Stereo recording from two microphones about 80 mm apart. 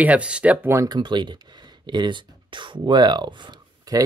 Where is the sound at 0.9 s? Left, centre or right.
Right.